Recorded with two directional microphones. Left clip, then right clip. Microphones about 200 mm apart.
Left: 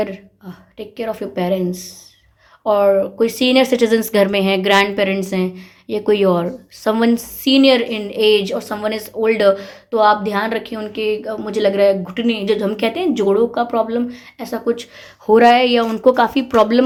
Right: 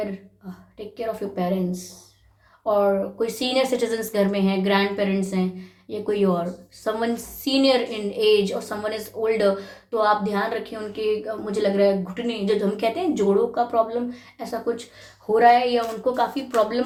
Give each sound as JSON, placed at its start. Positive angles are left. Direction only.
{"t": 0.9, "sound": "speech", "side_deg": 35}